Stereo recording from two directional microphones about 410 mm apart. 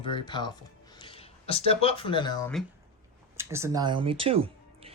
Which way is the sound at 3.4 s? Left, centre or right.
Centre.